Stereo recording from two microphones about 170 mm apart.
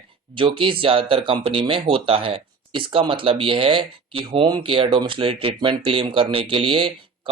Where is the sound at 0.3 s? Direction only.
30° right (ahead or behind).